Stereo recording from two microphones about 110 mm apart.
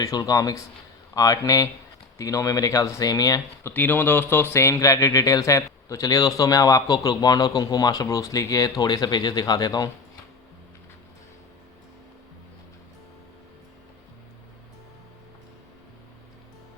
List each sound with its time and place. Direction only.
0.0 s speech: 35° left (ahead or behind)
3.7 s speech: 15° left (ahead or behind); by 9.9 s 35° left (ahead or behind)